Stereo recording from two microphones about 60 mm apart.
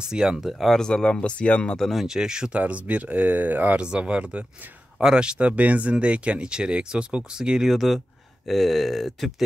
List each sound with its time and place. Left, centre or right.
0.1 s speech: centre
0.7 s speech: centre
1.8 s speech: centre
2.0 s speech: centre
2.5 s speech: right
3.8 s speech: centre
7.7 s speech: centre